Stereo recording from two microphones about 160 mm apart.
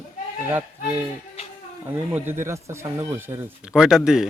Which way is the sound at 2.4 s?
15° right (ahead or behind).